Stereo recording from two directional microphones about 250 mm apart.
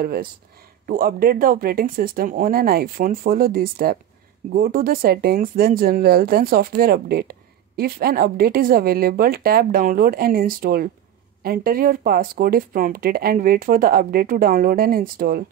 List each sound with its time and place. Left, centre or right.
0.0 s speech: right